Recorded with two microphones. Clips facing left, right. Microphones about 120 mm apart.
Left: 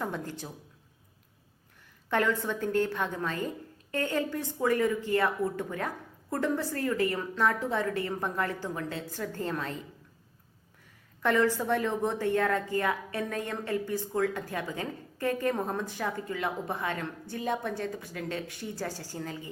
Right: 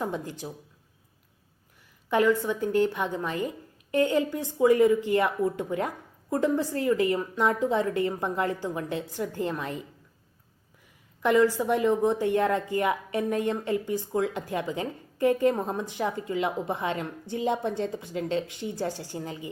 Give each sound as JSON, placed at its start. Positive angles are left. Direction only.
{"t": 0.0, "sound": "speech", "side_deg": -15}
{"t": 2.0, "sound": "a woman's voice", "side_deg": -10}
{"t": 11.2, "sound": "a woman's voice", "side_deg": -15}